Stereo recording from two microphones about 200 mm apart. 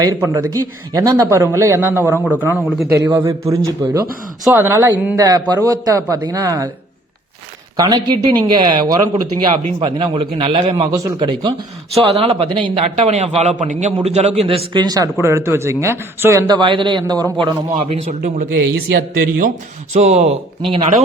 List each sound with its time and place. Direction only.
0.0 s a man's voice: 15° right (ahead or behind)
7.8 s a man's voice: 20° right (ahead or behind)
18.2 s a man's voice: 45° right (ahead or behind)
19.9 s speech: 35° right (ahead or behind)